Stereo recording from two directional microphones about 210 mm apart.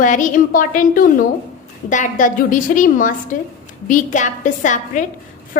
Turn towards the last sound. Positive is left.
turn(degrees=35)  # may be behind; listen again after turning